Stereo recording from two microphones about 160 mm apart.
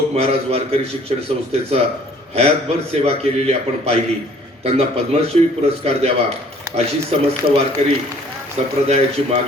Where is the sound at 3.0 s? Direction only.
40° right (ahead or behind).